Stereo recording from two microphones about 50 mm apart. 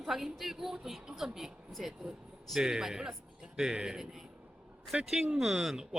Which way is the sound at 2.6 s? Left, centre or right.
Centre.